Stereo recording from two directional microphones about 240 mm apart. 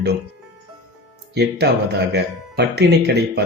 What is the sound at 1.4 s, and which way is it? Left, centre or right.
Speech, right.